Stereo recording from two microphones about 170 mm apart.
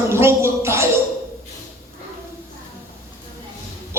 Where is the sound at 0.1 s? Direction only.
15° right (ahead or behind).